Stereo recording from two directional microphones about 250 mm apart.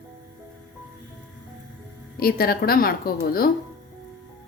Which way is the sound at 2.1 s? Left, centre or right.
Left.